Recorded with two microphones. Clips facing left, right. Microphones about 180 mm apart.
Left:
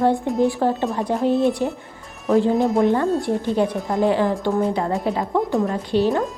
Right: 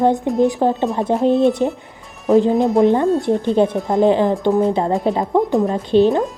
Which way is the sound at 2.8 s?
20° right (ahead or behind).